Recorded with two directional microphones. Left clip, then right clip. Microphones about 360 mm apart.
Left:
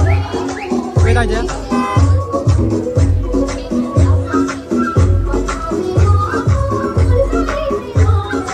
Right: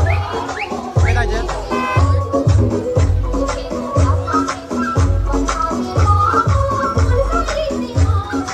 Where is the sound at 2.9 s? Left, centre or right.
Right.